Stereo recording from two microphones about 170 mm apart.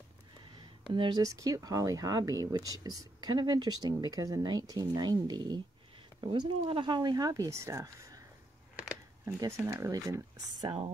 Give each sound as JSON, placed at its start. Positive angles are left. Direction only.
{"t": 0.8, "sound": "speech", "side_deg": -25}